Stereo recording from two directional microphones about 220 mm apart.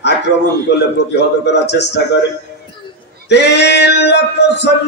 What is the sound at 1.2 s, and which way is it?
Speech, 50° left (ahead or behind).